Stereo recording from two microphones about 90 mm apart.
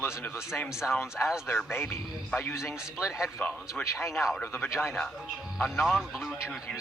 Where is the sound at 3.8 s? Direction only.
30° left (ahead or behind).